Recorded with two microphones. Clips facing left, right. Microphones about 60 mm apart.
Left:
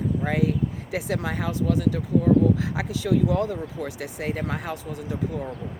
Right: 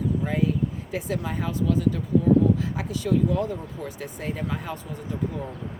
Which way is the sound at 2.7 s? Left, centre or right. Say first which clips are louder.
Left 1 dB; left.